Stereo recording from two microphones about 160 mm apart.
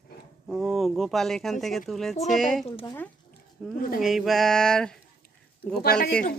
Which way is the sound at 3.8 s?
65° left (ahead or behind).